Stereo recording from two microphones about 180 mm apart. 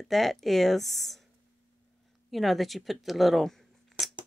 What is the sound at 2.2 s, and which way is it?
Speech, centre (ahead or behind).